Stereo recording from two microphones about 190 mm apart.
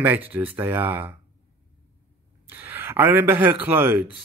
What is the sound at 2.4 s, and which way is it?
Speech, 10° right (ahead or behind).